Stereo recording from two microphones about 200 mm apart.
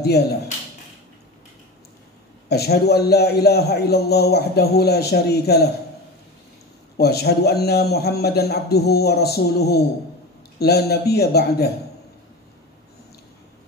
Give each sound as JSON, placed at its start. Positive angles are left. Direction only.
{"t": 0.0, "sound": "a man's voice", "side_deg": 55}
{"t": 2.4, "sound": "a man's voice", "side_deg": 55}
{"t": 7.0, "sound": "a man's voice", "side_deg": 55}